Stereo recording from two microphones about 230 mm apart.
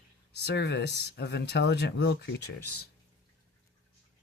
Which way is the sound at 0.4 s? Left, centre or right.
Left.